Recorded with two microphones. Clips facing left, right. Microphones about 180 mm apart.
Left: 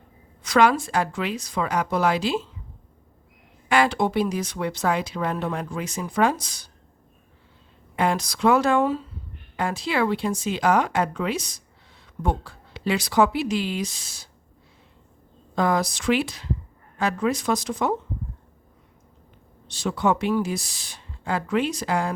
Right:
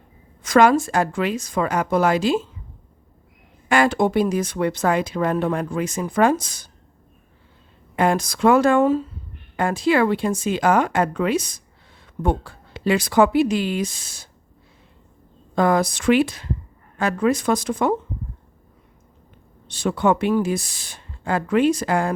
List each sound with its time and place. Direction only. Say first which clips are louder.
0.4 s speech: right 4 dB; 45° right (ahead or behind)
3.7 s speech: right 3 dB; 45° right (ahead or behind)
7.9 s speech: right 4 dB; 50° right (ahead or behind)
15.5 s speech: right 4 dB; 55° right (ahead or behind)
19.6 s speech: right 4 dB; 55° right (ahead or behind)